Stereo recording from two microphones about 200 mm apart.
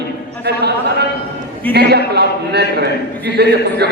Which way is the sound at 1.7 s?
55° right (ahead or behind).